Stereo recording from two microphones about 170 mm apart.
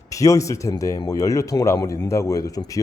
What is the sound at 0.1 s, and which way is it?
Speech, 20° left (ahead or behind).